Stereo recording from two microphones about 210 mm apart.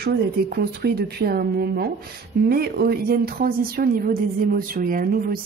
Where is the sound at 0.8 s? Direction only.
50° right (ahead or behind).